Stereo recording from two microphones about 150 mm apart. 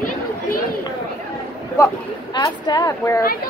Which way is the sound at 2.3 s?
30° left (ahead or behind).